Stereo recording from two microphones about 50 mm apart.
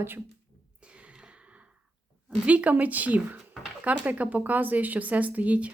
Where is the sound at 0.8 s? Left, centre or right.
Right.